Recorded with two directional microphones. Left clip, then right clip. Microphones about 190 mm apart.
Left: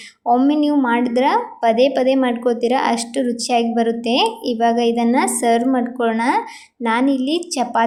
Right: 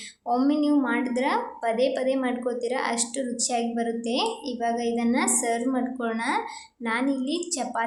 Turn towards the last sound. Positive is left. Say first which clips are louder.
# left 10 dB
turn(degrees=30)  # may be behind; listen again after turning